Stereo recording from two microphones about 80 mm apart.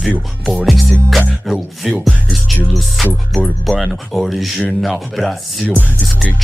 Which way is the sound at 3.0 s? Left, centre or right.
Centre.